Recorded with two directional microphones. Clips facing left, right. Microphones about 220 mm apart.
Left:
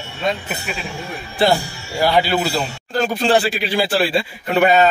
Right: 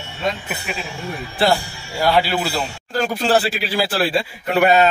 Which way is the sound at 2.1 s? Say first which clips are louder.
Left 3 dB; 5° right (ahead or behind).